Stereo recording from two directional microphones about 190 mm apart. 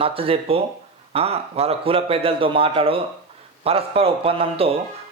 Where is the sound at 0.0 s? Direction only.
30° right (ahead or behind).